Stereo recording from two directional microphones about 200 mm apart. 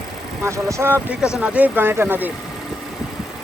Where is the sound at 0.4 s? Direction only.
15° right (ahead or behind).